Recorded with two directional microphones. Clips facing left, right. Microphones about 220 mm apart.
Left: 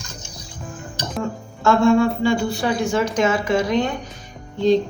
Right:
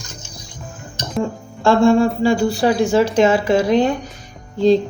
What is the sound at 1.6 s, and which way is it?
Speech, 30° right (ahead or behind).